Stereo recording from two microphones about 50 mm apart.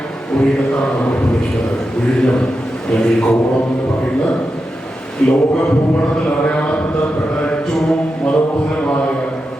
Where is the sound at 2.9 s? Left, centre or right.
Centre.